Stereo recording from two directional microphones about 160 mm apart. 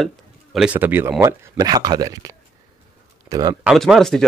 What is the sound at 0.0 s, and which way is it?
Speech, centre (ahead or behind).